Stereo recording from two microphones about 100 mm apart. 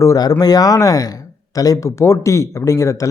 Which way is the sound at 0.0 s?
35° left (ahead or behind).